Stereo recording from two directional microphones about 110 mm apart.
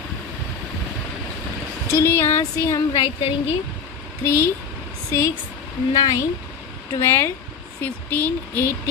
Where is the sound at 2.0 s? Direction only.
20° left (ahead or behind).